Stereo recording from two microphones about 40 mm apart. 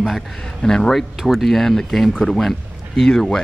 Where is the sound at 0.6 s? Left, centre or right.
Centre.